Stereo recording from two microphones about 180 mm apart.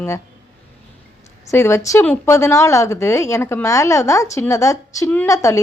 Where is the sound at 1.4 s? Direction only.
15° left (ahead or behind).